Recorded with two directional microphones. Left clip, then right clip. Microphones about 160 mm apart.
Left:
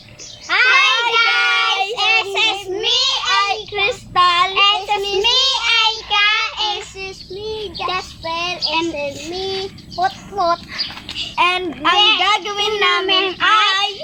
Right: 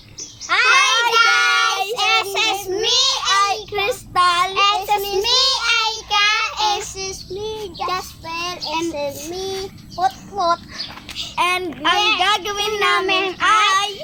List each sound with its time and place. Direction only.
0.4 s a sound: 20° right (ahead or behind)
0.7 s child singing: 5° right (ahead or behind)
7.0 s child singing: 20° right (ahead or behind)
10.5 s a sound: centre (ahead or behind)
11.3 s a child's voice: 5° left (ahead or behind)
11.9 s a woman's voice: 10° right (ahead or behind)
12.2 s speech: 5° left (ahead or behind)